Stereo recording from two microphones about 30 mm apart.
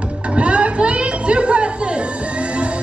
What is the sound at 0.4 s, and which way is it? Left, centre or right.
Chatter, right.